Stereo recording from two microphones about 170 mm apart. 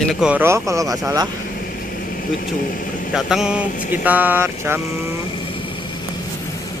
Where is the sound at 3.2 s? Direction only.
Centre (ahead or behind).